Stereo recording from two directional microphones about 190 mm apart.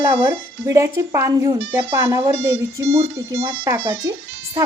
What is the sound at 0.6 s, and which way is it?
Speech, 15° right (ahead or behind).